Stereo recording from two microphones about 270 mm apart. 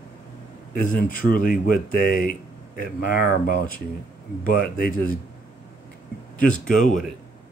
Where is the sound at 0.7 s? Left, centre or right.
Left.